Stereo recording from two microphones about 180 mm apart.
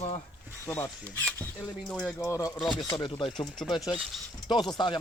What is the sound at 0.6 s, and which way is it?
Speech, 15° left (ahead or behind).